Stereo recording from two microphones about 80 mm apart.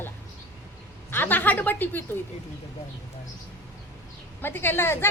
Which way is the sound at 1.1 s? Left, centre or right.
Left.